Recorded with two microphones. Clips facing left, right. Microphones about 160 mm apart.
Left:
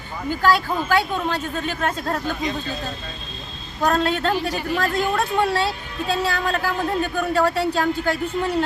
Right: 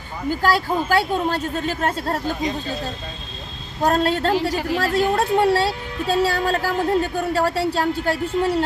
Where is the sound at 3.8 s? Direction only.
35° right (ahead or behind).